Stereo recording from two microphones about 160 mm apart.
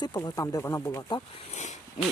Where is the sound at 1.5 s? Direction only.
45° left (ahead or behind).